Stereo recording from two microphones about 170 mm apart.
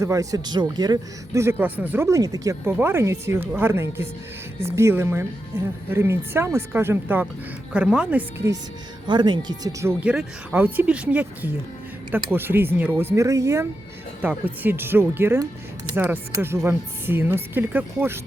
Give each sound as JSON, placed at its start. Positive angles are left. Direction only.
{"t": 0.0, "sound": "speech", "side_deg": -20}
{"t": 9.0, "sound": "speech", "side_deg": -25}
{"t": 10.0, "sound": "speech", "side_deg": -5}